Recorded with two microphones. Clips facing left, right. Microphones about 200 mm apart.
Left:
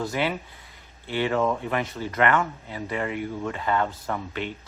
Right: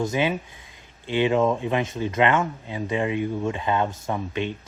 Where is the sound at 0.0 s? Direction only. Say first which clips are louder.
Right 3 dB; 20° right (ahead or behind).